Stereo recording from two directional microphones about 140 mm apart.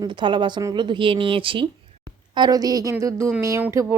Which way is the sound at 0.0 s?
35° right (ahead or behind).